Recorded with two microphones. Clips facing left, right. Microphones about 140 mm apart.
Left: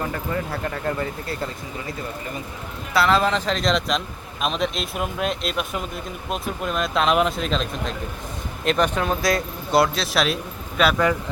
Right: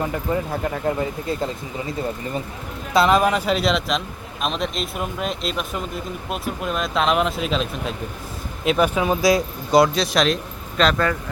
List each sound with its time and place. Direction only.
0.0 s speech: 15° right (ahead or behind)
2.9 s a man's voice: 20° right (ahead or behind); by 11.2 s 10° left (ahead or behind)